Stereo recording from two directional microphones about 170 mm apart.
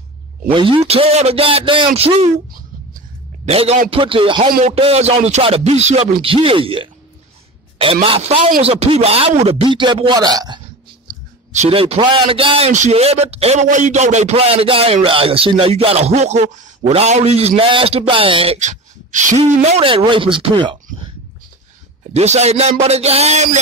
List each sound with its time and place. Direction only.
0.5 s a man's voice: 30° right (ahead or behind)
3.4 s a man's voice: 40° right (ahead or behind); by 10.6 s 25° right (ahead or behind)
11.5 s a man's voice: 40° right (ahead or behind)
22.1 s a man's voice: 40° right (ahead or behind)